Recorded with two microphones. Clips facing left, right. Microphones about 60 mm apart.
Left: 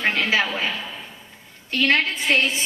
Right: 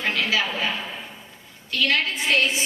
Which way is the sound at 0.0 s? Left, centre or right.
Left.